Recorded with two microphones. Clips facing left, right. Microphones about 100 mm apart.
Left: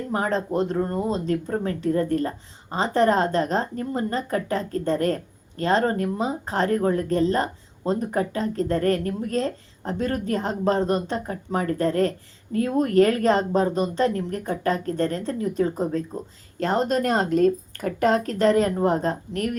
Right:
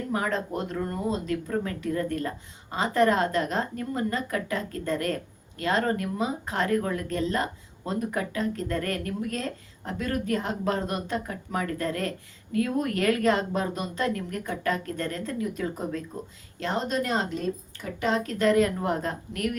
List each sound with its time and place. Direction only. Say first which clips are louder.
0.1 s speech: left 5 dB; 35° left (ahead or behind)